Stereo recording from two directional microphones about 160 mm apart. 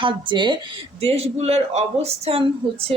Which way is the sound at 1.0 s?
40° right (ahead or behind).